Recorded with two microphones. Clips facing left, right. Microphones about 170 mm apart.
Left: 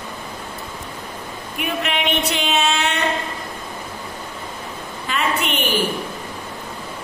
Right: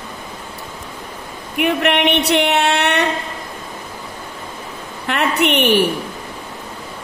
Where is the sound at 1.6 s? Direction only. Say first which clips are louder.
Right 8 dB; 65° right (ahead or behind).